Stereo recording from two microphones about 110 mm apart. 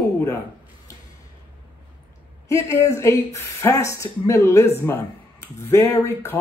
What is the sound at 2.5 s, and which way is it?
Speech, 30° left (ahead or behind).